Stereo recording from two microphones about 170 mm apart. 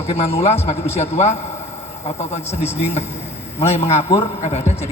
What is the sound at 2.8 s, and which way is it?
A man's voice, 40° left (ahead or behind).